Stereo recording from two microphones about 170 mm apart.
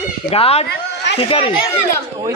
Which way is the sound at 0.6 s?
85° left.